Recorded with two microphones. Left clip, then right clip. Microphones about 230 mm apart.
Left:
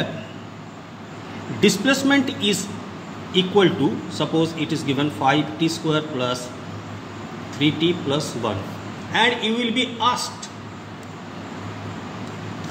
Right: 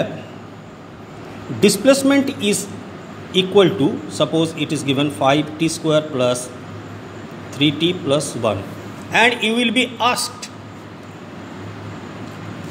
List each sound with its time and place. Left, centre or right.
1.6 s a man's voice: centre
7.5 s a man's voice: right
9.1 s a man's voice: right